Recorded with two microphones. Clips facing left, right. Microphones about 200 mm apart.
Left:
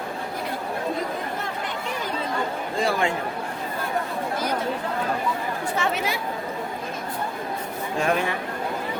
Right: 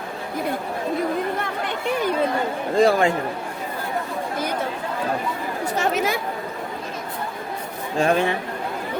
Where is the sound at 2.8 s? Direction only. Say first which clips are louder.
Right 7 dB; 40° right (ahead or behind).